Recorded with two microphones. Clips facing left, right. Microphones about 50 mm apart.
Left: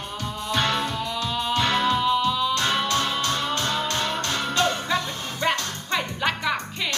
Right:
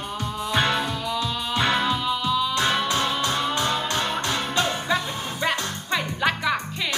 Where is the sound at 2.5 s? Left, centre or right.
Centre.